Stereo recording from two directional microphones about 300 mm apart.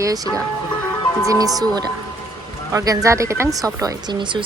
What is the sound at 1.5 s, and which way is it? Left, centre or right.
A woman's voice, centre.